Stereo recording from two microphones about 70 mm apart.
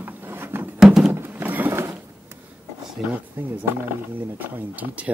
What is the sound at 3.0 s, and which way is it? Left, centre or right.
Speech, centre.